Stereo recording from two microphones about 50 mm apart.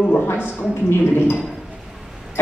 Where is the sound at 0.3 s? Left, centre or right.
Left.